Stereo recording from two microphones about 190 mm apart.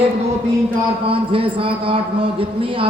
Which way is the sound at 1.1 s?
30° right (ahead or behind).